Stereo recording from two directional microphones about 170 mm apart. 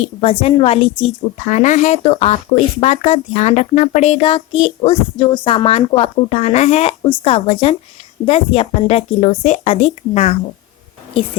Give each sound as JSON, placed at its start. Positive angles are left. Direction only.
{"t": 0.0, "sound": "speech", "side_deg": 35}